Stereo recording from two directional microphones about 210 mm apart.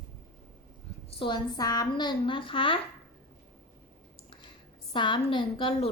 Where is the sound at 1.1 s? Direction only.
20° left (ahead or behind).